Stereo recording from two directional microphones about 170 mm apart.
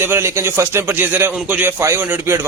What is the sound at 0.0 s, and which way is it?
Speech, 15° right (ahead or behind).